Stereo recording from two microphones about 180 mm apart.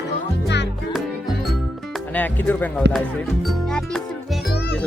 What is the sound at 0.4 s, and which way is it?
Music, 75° left (ahead or behind).